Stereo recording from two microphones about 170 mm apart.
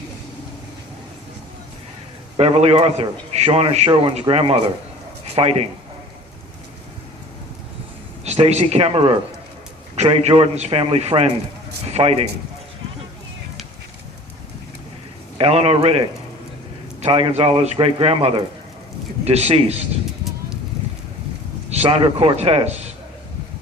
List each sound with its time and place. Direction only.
2.4 s a man's voice: 35° right (ahead or behind)
8.2 s a man's voice: 40° right (ahead or behind)
15.4 s a man's voice: 35° right (ahead or behind)
21.7 s a man's voice: 40° right (ahead or behind)